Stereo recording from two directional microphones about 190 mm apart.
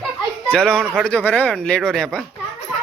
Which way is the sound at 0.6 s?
5° left (ahead or behind).